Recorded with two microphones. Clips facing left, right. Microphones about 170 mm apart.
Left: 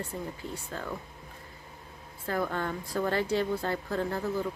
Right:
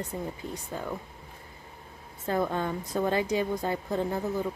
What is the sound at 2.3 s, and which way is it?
Speech, 20° right (ahead or behind).